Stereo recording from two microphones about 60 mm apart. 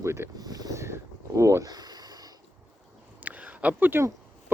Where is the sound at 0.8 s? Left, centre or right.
Right.